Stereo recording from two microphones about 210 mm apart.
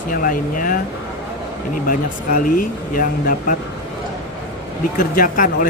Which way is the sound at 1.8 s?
40° left (ahead or behind).